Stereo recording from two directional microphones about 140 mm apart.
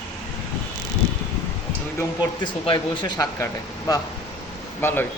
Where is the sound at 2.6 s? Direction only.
35° left (ahead or behind); by 5.0 s 15° left (ahead or behind).